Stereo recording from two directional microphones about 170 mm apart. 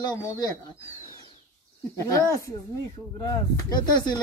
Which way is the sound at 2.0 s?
20° left (ahead or behind).